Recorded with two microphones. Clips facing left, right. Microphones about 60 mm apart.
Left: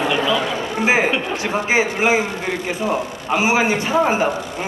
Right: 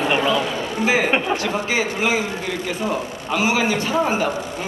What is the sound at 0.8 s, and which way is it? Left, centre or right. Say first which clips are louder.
A man's voice: left 1 dB; left.